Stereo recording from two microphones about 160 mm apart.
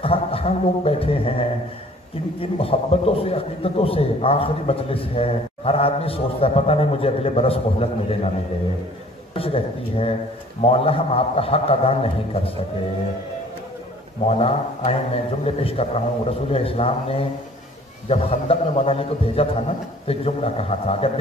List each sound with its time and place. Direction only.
0.0 s a man's voice: 35° left (ahead or behind)
2.4 s a man's voice: 35° left (ahead or behind)
9.3 s a man's voice: 35° left (ahead or behind)
14.2 s a man's voice: 40° left (ahead or behind)